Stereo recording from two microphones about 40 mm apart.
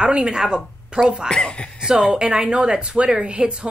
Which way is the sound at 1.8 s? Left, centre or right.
Centre.